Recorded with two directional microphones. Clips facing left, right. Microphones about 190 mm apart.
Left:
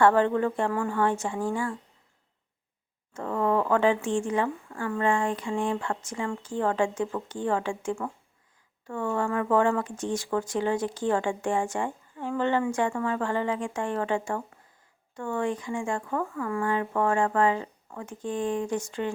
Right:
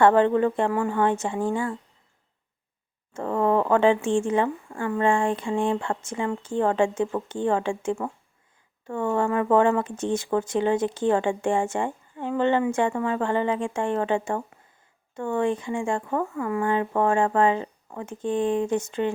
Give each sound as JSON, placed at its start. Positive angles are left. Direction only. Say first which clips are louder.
{"t": 0.0, "sound": "speech", "louder": "right 3 dB", "side_deg": -20}
{"t": 3.1, "sound": "speech", "louder": "right 3 dB", "side_deg": -30}